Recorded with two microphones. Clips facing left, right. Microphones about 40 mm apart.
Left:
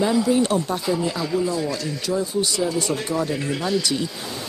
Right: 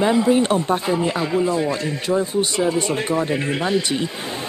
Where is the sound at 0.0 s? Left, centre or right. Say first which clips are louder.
Right 3 dB; right.